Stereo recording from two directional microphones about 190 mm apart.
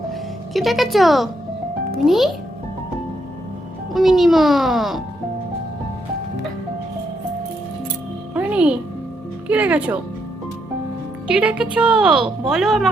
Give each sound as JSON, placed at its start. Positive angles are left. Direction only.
{"t": 0.1, "sound": "a woman's voice", "side_deg": 0}
{"t": 3.9, "sound": "a woman's voice", "side_deg": 0}
{"t": 8.3, "sound": "music", "side_deg": -5}
{"t": 9.5, "sound": "speech", "side_deg": -10}
{"t": 11.3, "sound": "a woman's voice", "side_deg": -5}